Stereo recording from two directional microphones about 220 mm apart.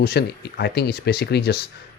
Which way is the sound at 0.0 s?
45° left (ahead or behind).